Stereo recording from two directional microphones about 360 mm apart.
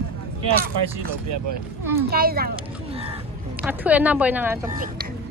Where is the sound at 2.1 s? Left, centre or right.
Right.